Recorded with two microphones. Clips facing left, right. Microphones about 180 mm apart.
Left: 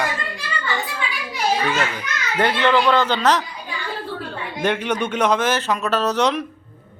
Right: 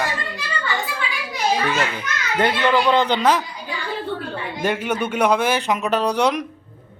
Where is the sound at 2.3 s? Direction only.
15° right (ahead or behind).